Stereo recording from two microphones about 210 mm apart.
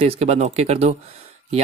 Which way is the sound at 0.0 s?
30° right (ahead or behind).